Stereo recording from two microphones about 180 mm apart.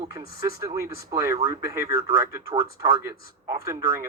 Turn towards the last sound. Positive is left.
turn(degrees=-15)  # may be behind; listen again after turning